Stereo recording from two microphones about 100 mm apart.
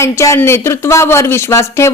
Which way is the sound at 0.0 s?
30° left (ahead or behind).